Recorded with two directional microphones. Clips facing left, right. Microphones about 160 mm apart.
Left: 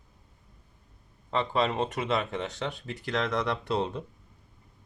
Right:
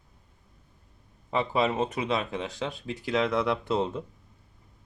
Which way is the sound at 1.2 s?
5° right (ahead or behind).